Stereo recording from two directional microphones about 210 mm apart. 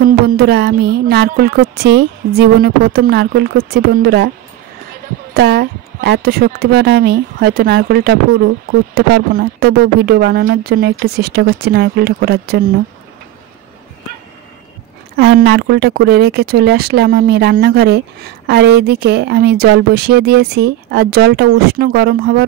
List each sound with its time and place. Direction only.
0.0 s a woman's voice: 45° right (ahead or behind)
5.3 s a woman's voice: 50° right (ahead or behind)
15.1 s a woman's voice: 55° right (ahead or behind)